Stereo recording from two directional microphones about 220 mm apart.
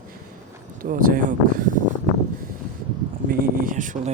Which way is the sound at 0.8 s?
40° right (ahead or behind).